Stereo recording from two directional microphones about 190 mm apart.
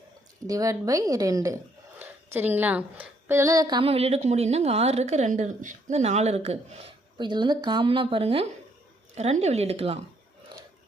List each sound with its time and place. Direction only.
0.4 s a woman's voice: 20° right (ahead or behind); by 6.6 s 35° right (ahead or behind)
7.2 s a woman's voice: 25° right (ahead or behind)